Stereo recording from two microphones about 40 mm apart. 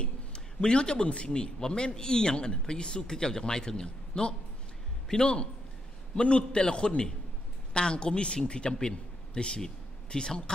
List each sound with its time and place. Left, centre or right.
0.0 s a man's voice: left